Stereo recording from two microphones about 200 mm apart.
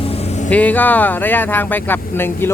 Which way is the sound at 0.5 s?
10° left (ahead or behind).